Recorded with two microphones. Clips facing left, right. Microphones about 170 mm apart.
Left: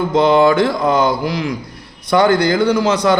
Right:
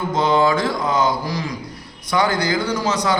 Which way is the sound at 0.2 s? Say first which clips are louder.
Left 6 dB; 65° left (ahead or behind).